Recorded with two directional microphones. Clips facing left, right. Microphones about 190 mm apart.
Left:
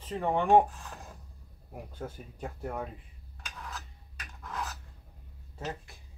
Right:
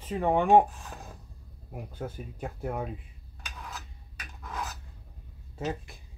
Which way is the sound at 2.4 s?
10° right (ahead or behind).